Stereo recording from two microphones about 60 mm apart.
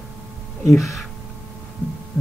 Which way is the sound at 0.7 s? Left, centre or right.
Centre.